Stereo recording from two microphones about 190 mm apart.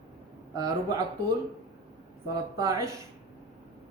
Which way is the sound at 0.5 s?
20° right (ahead or behind).